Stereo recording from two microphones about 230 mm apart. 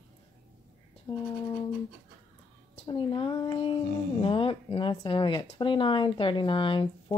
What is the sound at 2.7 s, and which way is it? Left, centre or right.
Speech, left.